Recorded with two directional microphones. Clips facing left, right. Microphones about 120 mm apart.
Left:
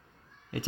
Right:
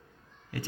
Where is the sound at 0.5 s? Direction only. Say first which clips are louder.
Left 2 dB; 20° left (ahead or behind).